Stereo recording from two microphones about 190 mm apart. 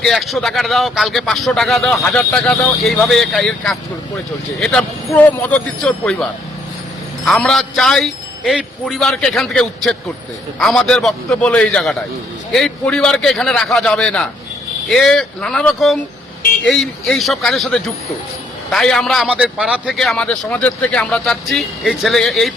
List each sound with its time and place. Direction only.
0.0 s a man's voice: centre (ahead or behind)
7.3 s a man's voice: 5° left (ahead or behind)